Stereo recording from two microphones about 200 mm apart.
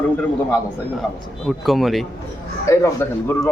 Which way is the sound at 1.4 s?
Centre (ahead or behind).